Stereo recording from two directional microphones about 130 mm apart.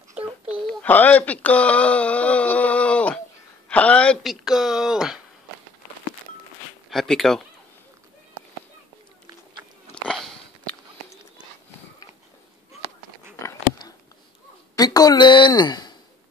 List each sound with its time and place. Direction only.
0.1 s a sound: 10° right (ahead or behind)
0.8 s speech: 15° left (ahead or behind); by 5.2 s 5° right (ahead or behind)
6.9 s speech: centre (ahead or behind)
10.0 s sniff: centre (ahead or behind)
13.4 s a sound: 20° left (ahead or behind)
14.8 s a woman's voice: 30° left (ahead or behind)